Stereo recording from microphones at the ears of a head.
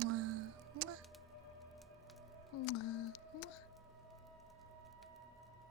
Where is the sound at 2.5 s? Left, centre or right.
Left.